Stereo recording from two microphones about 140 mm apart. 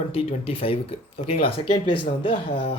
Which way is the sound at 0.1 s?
45° left (ahead or behind).